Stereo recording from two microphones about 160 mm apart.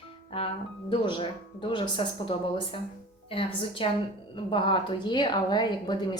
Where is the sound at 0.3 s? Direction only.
35° left (ahead or behind).